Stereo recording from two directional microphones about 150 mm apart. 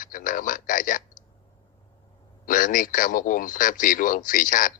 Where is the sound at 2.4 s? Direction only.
65° left (ahead or behind).